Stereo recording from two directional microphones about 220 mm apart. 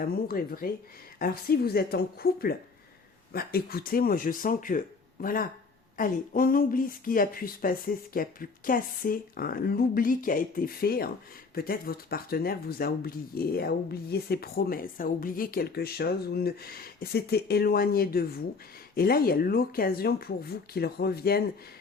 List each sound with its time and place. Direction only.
0.0 s speech: 40° left (ahead or behind)